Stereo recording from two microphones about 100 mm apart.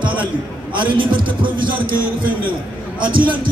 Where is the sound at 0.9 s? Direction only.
55° right (ahead or behind).